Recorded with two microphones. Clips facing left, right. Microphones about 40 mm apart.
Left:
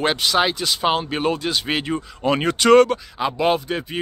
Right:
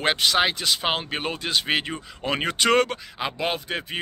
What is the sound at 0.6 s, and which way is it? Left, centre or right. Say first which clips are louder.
Speech: left 4 dB; right.